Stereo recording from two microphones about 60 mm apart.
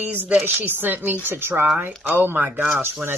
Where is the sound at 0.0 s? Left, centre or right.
Right.